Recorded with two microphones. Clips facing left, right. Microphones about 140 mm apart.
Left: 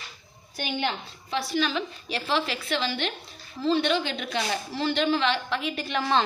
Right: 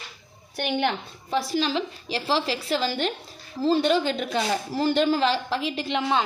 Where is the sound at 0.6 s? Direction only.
55° right (ahead or behind).